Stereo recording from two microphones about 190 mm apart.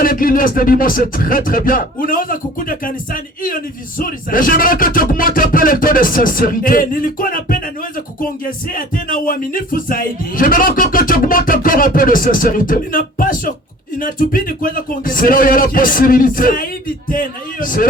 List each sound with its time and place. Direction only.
0.0 s speech: 50° left (ahead or behind)